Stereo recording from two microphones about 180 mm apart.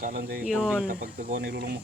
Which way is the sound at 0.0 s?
60° right (ahead or behind).